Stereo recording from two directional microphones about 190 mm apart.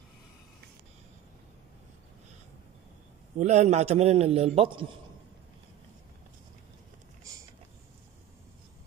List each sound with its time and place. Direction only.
3.3 s a man's voice: 35° right (ahead or behind)